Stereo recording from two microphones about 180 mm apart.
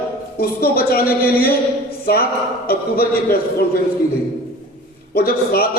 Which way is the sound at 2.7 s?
60° left (ahead or behind).